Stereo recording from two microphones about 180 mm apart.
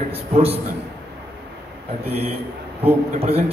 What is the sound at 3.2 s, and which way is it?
Speech, 35° right (ahead or behind).